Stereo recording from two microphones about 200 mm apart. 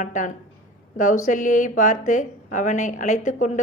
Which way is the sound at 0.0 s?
40° left (ahead or behind).